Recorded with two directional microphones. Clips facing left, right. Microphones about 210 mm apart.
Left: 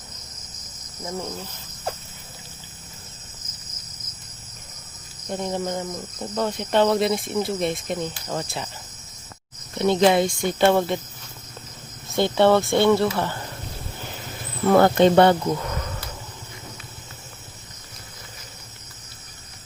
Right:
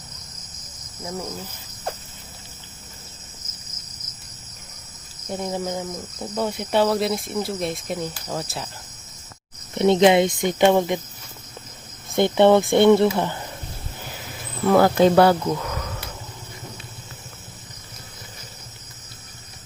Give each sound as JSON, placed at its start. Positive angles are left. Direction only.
{"t": 5.3, "sound": "speech", "side_deg": -5}
{"t": 9.7, "sound": "speech", "side_deg": -25}
{"t": 12.1, "sound": "speech", "side_deg": -20}
{"t": 14.6, "sound": "speech", "side_deg": 0}